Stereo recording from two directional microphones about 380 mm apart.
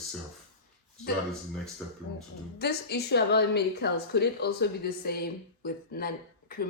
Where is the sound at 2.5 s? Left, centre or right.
Left.